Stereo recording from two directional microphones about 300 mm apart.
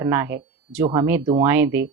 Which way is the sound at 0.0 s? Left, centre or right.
Centre.